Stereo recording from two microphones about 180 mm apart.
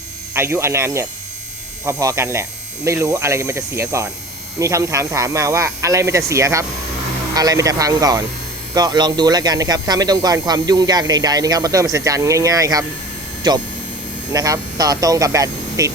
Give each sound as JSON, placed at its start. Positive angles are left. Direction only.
{"t": 0.3, "sound": "speech", "side_deg": -15}